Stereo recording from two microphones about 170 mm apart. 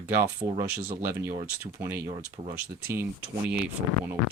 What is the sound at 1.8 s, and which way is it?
Speech, 10° right (ahead or behind).